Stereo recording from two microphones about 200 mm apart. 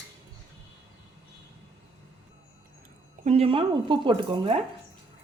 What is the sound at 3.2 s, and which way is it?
Speech, 30° right (ahead or behind).